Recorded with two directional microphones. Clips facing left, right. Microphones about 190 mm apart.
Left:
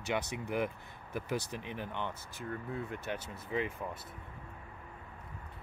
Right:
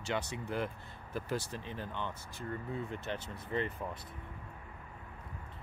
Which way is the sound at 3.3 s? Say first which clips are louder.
Even; 5° left (ahead or behind).